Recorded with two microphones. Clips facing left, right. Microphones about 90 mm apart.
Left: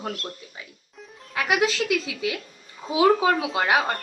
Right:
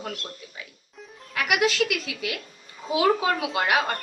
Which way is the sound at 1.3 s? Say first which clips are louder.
Left 1 dB; 25° left (ahead or behind).